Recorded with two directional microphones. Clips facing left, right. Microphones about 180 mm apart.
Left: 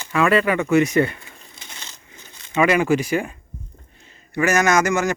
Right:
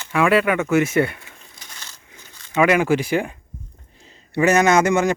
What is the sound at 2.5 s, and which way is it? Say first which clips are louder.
Speech: right 1 dB; 10° right (ahead or behind).